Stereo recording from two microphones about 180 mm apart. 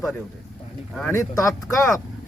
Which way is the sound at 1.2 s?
15° left (ahead or behind).